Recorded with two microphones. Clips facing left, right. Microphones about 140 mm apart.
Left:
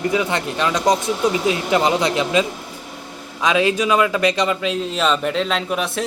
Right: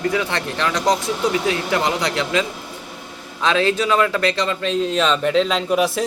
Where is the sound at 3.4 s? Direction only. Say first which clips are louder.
Left 1 dB; 15° left (ahead or behind).